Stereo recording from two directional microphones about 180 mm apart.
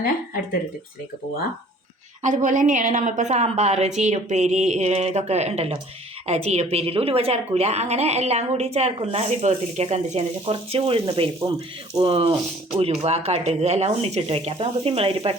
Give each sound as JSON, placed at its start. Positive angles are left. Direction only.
{"t": 2.2, "sound": "a woman's voice", "side_deg": -45}